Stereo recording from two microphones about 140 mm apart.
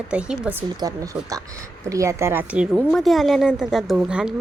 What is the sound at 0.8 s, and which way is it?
A woman's voice, 25° right (ahead or behind).